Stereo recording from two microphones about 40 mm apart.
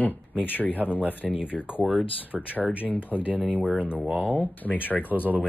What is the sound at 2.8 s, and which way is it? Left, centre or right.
Speech, left.